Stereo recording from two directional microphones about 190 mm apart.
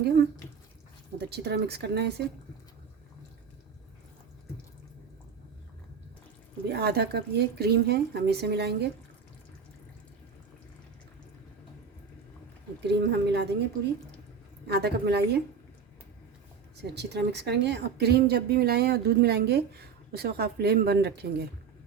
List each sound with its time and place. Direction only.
1.2 s speech: 60° right (ahead or behind)
6.7 s speech: 60° right (ahead or behind)
12.8 s speech: 60° right (ahead or behind)
14.7 s speech: 60° right (ahead or behind)
16.8 s speech: 60° right (ahead or behind)